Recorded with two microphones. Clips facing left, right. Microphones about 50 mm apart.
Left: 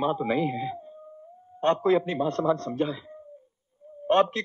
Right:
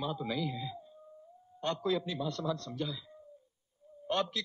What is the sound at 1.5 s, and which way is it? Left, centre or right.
A man's voice, left.